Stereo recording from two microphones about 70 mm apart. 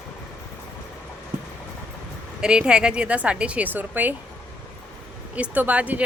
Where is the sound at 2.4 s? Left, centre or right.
Centre.